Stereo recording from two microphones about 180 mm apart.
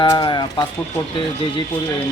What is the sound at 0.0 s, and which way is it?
Speech, 25° left (ahead or behind).